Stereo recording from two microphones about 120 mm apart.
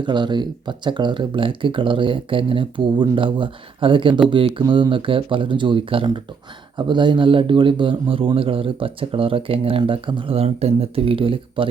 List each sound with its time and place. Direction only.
0.0 s a man's voice: 40° right (ahead or behind)